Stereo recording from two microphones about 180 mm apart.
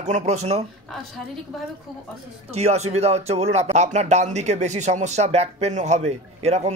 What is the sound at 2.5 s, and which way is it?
Speech, 35° right (ahead or behind).